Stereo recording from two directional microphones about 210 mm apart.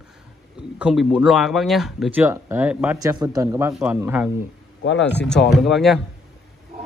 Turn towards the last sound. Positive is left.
turn(degrees=0)  # may be behind; listen again after turning